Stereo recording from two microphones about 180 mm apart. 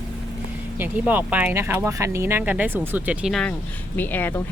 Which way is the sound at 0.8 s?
10° right (ahead or behind).